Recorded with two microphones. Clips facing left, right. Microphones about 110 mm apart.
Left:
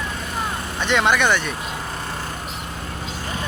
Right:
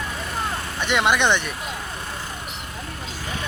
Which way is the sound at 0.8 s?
15° right (ahead or behind).